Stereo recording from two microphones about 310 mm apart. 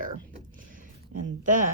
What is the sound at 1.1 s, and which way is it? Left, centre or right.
Speech, right.